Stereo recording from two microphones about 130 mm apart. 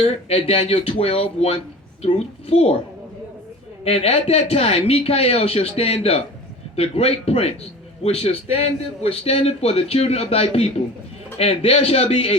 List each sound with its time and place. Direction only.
0.0 s speech: 45° left (ahead or behind)
3.8 s a man's voice: 50° left (ahead or behind)